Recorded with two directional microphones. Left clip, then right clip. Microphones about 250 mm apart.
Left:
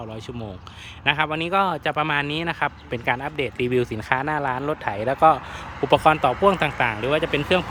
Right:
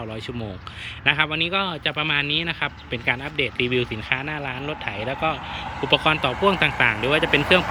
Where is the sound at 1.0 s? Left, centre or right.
Centre.